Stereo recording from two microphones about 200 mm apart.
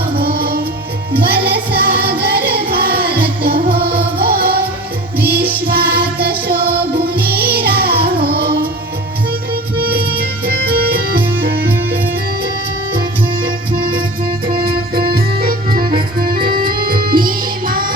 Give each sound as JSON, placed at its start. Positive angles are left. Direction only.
{"t": 0.2, "sound": "music", "side_deg": -50}
{"t": 5.6, "sound": "music", "side_deg": -50}
{"t": 10.4, "sound": "music", "side_deg": -50}
{"t": 14.9, "sound": "music", "side_deg": -50}